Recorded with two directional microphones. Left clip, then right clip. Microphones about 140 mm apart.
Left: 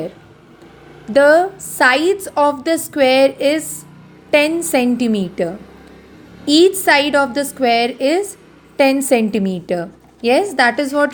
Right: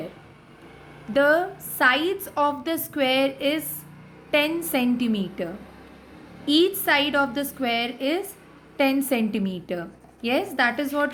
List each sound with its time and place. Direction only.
1.1 s a woman's voice: 35° left (ahead or behind)